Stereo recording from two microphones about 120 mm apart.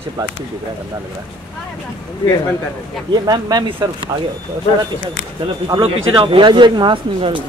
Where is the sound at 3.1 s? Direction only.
35° right (ahead or behind).